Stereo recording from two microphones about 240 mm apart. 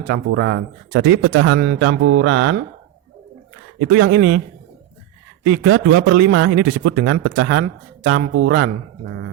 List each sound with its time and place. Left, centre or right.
0.1 s speech: right
3.8 s speech: right
5.4 s speech: right